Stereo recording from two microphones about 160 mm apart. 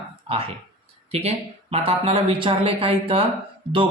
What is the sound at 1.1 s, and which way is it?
Speech, 40° right (ahead or behind).